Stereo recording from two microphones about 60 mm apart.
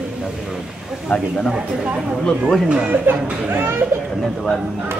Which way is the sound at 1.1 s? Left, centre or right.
Left.